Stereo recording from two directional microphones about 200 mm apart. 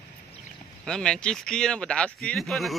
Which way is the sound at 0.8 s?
5° left (ahead or behind).